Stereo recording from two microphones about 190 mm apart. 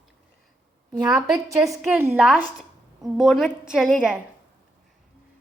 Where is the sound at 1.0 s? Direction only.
5° right (ahead or behind).